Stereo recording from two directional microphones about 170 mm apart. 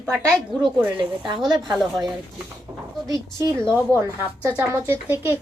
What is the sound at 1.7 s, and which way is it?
Speech, centre (ahead or behind).